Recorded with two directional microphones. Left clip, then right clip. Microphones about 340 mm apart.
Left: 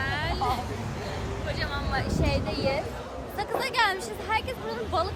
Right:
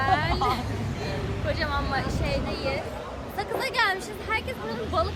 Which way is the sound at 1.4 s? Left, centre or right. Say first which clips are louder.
Right 5 dB; centre.